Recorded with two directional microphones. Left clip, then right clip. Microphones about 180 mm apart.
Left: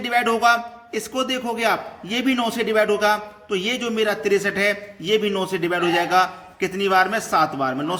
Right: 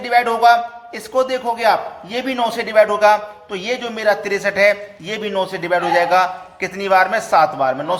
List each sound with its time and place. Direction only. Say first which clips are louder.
0.0 s a man's voice: right 5 dB; 15° left (ahead or behind)